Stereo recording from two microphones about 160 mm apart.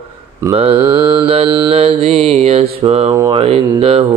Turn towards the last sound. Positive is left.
turn(degrees=-40)  # may be behind; listen again after turning